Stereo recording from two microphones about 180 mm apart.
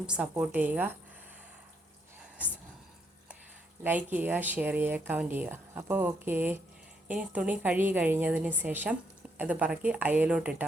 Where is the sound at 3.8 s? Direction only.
10° right (ahead or behind).